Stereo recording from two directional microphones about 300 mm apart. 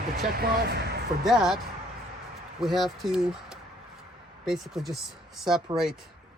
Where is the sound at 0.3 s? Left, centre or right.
Right.